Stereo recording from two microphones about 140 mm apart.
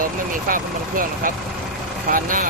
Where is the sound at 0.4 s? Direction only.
85° right.